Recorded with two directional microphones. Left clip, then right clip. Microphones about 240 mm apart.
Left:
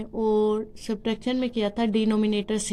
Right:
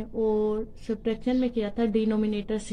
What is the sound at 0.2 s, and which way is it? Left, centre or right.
Speech, left.